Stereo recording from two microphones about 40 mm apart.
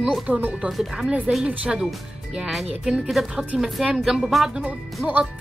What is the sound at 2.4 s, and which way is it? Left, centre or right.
A woman's voice, centre.